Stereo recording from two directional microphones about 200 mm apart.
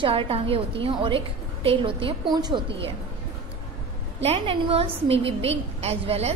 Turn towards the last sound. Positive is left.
turn(degrees=-30)  # may be behind; listen again after turning